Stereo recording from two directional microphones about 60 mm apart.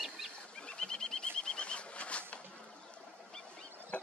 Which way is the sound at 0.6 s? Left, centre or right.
Centre.